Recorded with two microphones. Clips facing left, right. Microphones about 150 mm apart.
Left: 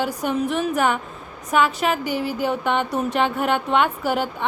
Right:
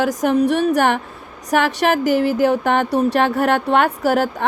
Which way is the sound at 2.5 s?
40° right (ahead or behind).